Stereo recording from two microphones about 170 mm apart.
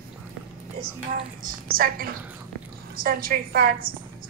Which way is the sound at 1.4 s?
60° right (ahead or behind).